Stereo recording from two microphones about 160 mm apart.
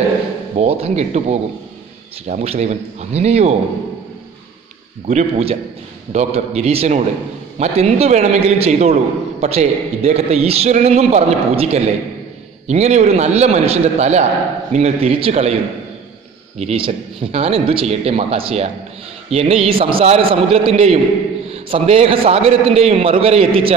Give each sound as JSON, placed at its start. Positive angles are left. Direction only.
{"t": 0.6, "sound": "a man's voice", "side_deg": -40}
{"t": 5.0, "sound": "a man's voice", "side_deg": -40}